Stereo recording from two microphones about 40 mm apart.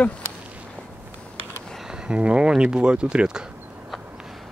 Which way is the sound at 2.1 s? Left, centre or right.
Right.